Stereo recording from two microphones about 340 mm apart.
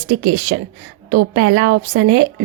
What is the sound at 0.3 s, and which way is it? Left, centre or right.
Speech, right.